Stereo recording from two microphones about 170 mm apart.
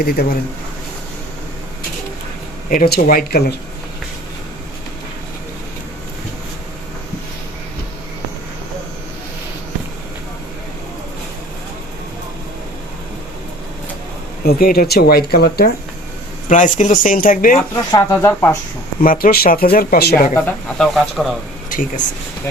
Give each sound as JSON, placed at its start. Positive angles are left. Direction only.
{"t": 0.2, "sound": "speech", "side_deg": 65}
{"t": 2.6, "sound": "speech", "side_deg": 60}
{"t": 14.4, "sound": "speech", "side_deg": 60}
{"t": 16.5, "sound": "speech", "side_deg": 50}
{"t": 17.9, "sound": "speech", "side_deg": 15}
{"t": 19.0, "sound": "speech", "side_deg": 55}
{"t": 20.3, "sound": "speech", "side_deg": 10}
{"t": 21.7, "sound": "speech", "side_deg": 50}